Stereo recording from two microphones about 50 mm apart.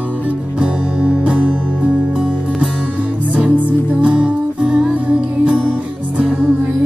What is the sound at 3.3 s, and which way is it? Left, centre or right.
Music, right.